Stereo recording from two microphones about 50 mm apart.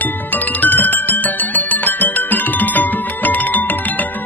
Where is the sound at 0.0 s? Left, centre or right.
Left.